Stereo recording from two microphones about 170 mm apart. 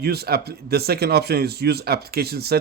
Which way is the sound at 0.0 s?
70° right (ahead or behind).